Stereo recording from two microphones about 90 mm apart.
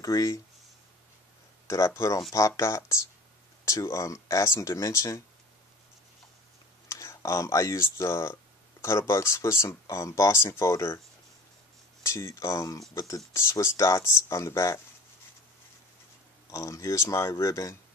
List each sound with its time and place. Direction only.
0.0 s speech: 40° left (ahead or behind)
1.7 s speech: 35° left (ahead or behind)
6.9 s speech: 30° left (ahead or behind)
12.0 s speech: 30° left (ahead or behind)
16.4 s speech: 35° left (ahead or behind)